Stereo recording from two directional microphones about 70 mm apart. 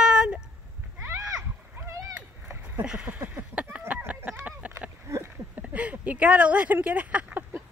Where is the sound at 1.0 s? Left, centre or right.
Right.